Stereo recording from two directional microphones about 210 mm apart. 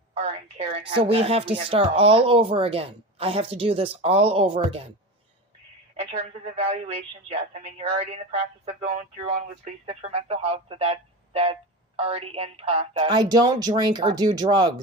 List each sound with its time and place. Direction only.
0.1 s a woman's voice: 30° right (ahead or behind)
6.0 s a woman's voice: 30° right (ahead or behind)